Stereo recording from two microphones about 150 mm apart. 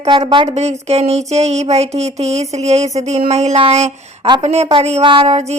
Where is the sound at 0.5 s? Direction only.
45° right (ahead or behind).